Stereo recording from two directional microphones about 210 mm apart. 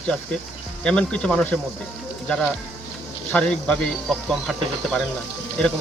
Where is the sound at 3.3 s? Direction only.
5° left (ahead or behind).